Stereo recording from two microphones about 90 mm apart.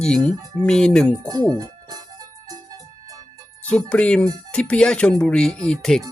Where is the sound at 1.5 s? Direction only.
45° right (ahead or behind).